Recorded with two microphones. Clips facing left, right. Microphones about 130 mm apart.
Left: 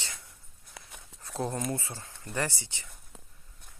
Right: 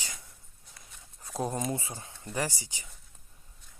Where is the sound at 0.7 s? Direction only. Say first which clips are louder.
Left 7 dB; 70° left (ahead or behind).